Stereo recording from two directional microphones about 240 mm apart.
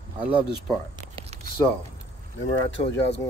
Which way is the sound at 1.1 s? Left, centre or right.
Right.